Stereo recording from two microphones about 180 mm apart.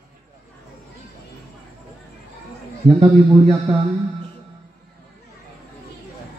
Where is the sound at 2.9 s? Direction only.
35° right (ahead or behind).